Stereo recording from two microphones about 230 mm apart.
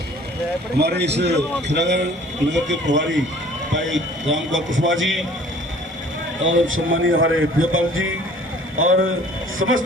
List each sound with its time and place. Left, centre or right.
0.8 s a man's voice: right
6.4 s a man's voice: right